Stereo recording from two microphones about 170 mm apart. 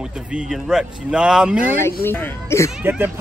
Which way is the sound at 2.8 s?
10° right (ahead or behind).